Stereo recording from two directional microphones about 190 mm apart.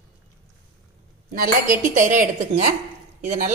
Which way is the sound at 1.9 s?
40° right (ahead or behind).